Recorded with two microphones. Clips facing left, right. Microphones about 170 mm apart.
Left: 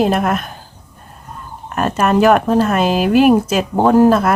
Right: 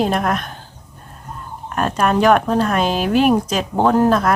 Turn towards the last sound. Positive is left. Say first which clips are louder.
# left 4 dB
turn(degrees=5)  # may be behind; listen again after turning